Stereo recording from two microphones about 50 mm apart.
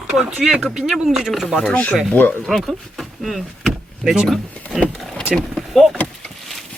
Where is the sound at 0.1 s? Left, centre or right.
Centre.